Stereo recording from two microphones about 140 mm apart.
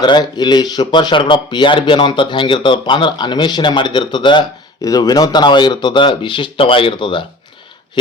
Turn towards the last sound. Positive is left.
turn(degrees=35)  # may be behind; listen again after turning